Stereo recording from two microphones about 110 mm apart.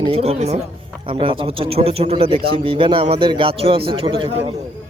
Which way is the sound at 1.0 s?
50° right (ahead or behind).